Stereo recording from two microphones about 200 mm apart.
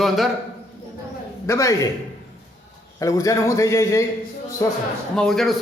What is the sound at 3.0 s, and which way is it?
Speech, 15° left (ahead or behind).